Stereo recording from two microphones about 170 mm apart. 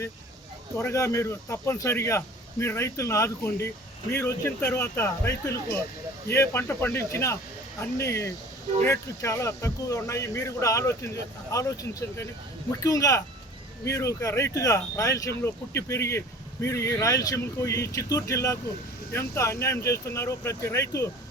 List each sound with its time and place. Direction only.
0.8 s speech: 20° left (ahead or behind)